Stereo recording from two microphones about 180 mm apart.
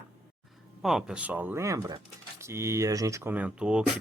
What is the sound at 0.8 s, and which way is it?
Speech, centre (ahead or behind).